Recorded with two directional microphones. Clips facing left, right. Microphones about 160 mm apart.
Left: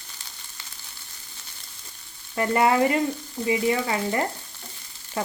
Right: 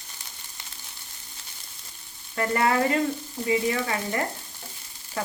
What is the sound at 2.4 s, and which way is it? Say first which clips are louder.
Frying: left 3 dB; 20° left (ahead or behind).